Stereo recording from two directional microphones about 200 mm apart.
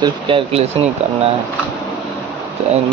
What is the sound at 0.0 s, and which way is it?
Speech, 30° right (ahead or behind).